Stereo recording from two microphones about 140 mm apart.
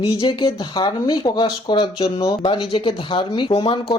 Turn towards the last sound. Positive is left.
turn(degrees=35)  # may be behind; listen again after turning